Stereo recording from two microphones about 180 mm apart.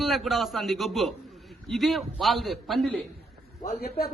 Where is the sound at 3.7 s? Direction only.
60° left (ahead or behind).